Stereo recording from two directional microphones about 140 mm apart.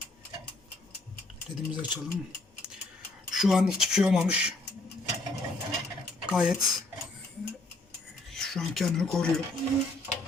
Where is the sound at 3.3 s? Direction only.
Centre (ahead or behind).